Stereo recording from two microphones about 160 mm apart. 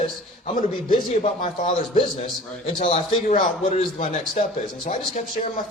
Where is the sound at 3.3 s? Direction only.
50° left (ahead or behind).